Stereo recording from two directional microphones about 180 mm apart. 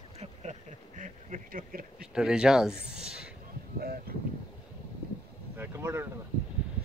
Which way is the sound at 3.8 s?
60° right (ahead or behind).